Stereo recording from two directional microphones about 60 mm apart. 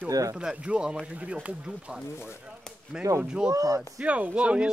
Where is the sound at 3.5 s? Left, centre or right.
Right.